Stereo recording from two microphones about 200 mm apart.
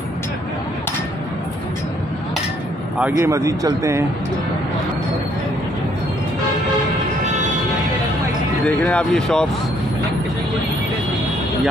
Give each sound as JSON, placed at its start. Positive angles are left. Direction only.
{"t": 3.0, "sound": "a man's voice", "side_deg": -15}
{"t": 8.6, "sound": "speech", "side_deg": 5}